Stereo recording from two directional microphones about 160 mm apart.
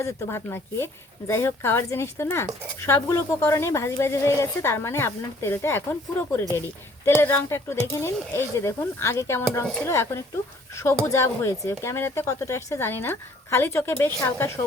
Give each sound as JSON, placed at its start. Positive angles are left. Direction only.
{"t": 0.0, "sound": "speech", "side_deg": 15}